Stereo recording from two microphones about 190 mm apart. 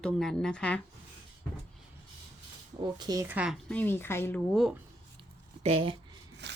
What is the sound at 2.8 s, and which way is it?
Speech, 20° right (ahead or behind).